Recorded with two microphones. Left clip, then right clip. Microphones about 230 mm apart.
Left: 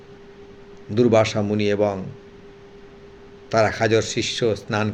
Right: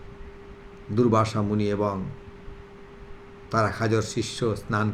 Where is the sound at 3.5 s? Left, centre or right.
Centre.